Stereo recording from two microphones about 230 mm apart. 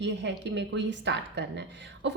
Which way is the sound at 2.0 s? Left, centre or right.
Right.